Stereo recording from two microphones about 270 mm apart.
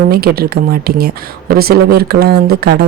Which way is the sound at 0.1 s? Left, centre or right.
Right.